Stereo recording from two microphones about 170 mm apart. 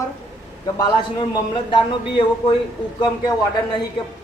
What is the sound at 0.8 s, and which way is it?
A man's voice, 25° left (ahead or behind).